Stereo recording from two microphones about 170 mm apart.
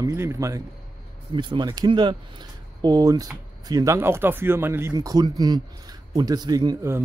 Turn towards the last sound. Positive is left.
turn(degrees=-20)  # may be behind; listen again after turning